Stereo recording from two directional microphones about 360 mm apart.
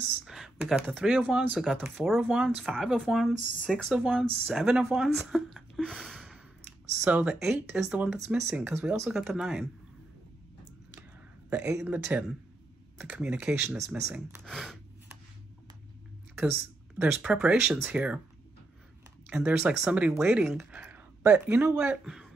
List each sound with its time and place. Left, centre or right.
0.2 s speech: centre
11.5 s speech: centre
17.0 s speech: centre
19.2 s speech: centre